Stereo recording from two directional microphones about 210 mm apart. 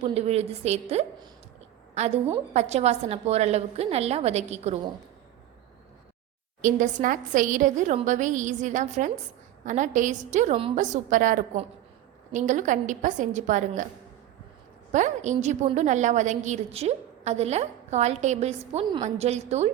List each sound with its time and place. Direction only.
0.0 s a woman's voice: 30° right (ahead or behind)
2.3 s a woman's voice: 30° right (ahead or behind)
6.6 s a woman's voice: 35° right (ahead or behind)
14.9 s a woman's voice: 35° right (ahead or behind)